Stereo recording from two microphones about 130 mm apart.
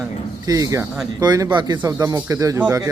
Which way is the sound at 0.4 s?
25° right (ahead or behind).